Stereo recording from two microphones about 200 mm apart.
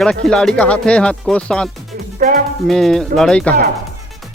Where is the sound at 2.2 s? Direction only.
45° right (ahead or behind).